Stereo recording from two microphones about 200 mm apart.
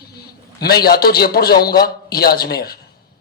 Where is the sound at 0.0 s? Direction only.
50° left (ahead or behind).